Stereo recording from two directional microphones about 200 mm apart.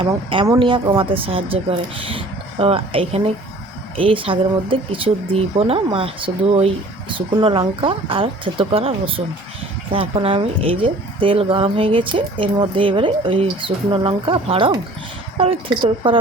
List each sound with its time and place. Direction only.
0.0 s speech: 25° right (ahead or behind)